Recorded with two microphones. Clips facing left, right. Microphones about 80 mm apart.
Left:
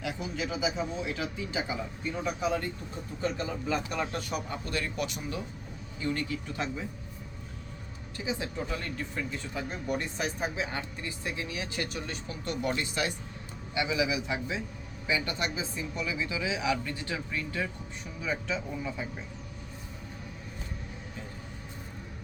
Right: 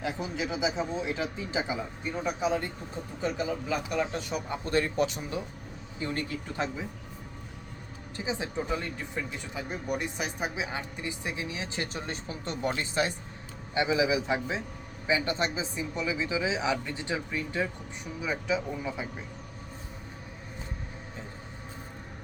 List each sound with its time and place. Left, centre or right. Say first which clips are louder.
0.0 s a man's voice: right 2 dB; right
8.1 s a man's voice: right 2 dB; right
18.2 s speech: right 3 dB; centre